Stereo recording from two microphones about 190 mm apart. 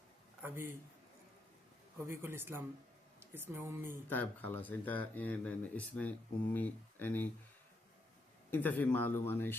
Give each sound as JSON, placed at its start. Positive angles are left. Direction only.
{"t": 0.4, "sound": "speech", "side_deg": -10}
{"t": 2.0, "sound": "speech", "side_deg": -10}
{"t": 4.1, "sound": "speech", "side_deg": 10}
{"t": 8.4, "sound": "speech", "side_deg": 10}